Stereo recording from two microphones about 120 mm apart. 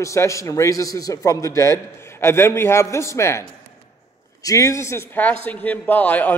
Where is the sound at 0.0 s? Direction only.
25° left (ahead or behind).